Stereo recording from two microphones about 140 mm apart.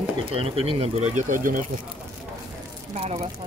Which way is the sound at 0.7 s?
50° right (ahead or behind).